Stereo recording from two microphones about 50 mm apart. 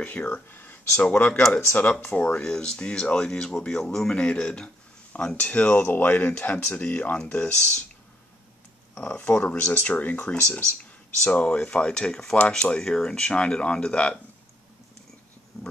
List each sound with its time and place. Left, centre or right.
0.3 s a man's voice: left
2.4 s a man's voice: centre
5.5 s speech: left
6.3 s a man's voice: left
9.2 s a man's voice: left; by 12.4 s centre
12.4 s a man's voice: left
12.7 s speech: centre